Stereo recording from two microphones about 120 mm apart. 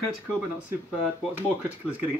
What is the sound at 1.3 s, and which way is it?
Speech, 15° right (ahead or behind).